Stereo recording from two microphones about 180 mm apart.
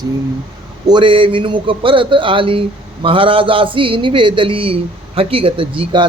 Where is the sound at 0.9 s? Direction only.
25° right (ahead or behind).